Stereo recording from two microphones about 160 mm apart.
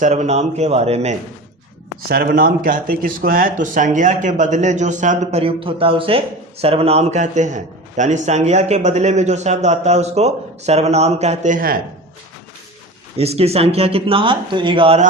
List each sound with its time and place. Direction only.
0.0 s speech: 45° right (ahead or behind)
2.0 s speech: 70° right (ahead or behind)
13.1 s speech: 40° right (ahead or behind)